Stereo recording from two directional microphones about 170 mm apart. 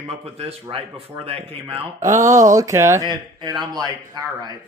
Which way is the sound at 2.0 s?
20° right (ahead or behind).